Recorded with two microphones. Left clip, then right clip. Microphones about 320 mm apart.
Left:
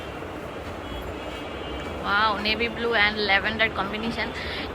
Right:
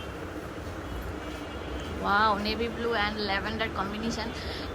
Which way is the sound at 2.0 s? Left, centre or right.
Centre.